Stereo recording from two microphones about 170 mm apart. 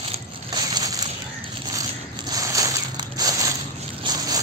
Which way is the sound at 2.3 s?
20° right (ahead or behind).